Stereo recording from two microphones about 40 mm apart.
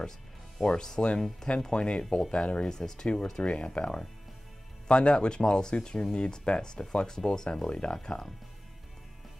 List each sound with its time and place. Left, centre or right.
0.6 s speech: centre